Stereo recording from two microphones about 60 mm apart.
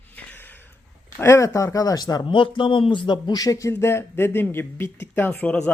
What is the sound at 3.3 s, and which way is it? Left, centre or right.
Speech, left.